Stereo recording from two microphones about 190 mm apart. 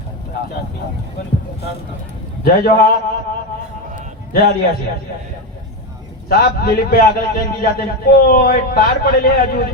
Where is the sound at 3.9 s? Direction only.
55° left (ahead or behind).